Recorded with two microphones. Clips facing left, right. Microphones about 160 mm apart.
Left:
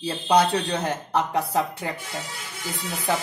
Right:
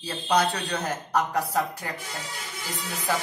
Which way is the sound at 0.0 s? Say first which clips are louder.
Left 4 dB; 30° left (ahead or behind).